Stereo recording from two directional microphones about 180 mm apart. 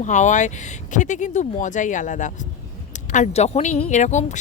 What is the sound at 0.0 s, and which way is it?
Speech, 40° left (ahead or behind).